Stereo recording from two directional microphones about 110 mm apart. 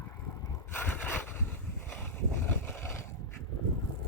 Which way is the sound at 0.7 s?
20° left (ahead or behind).